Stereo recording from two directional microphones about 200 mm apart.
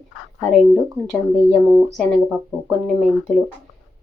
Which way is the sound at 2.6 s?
5° right (ahead or behind).